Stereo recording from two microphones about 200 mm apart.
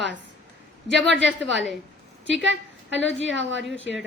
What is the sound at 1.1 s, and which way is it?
Speech, 65° right (ahead or behind).